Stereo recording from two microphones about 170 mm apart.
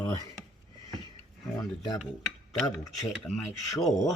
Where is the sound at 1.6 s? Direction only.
25° left (ahead or behind).